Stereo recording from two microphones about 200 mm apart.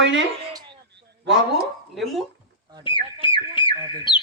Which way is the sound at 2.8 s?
25° left (ahead or behind).